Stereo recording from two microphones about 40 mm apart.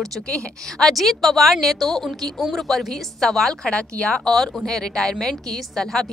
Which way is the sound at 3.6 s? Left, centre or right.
Left.